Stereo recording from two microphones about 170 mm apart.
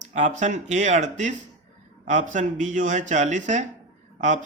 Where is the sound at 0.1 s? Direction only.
45° right (ahead or behind).